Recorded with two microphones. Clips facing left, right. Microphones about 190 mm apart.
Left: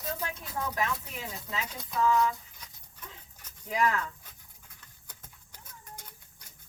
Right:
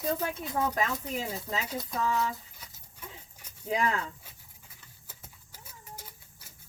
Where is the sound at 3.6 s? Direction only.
30° right (ahead or behind).